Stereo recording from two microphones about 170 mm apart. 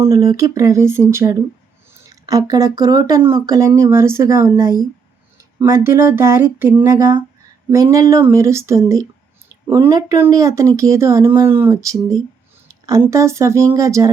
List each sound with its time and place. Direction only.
0.0 s speech: 20° right (ahead or behind)